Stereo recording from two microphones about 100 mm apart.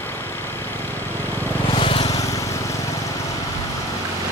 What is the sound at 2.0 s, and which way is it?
Vehicle, 35° left (ahead or behind).